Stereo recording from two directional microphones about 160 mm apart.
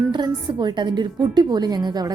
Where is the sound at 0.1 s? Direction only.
25° right (ahead or behind).